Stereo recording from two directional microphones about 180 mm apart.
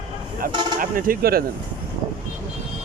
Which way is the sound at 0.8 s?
50° right (ahead or behind).